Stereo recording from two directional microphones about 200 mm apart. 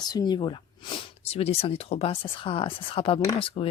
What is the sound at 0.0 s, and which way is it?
Speech, 20° left (ahead or behind).